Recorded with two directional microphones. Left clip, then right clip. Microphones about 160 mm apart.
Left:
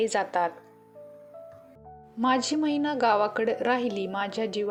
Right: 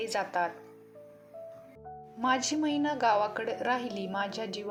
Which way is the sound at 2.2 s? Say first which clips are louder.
Left 4 dB; 35° left (ahead or behind).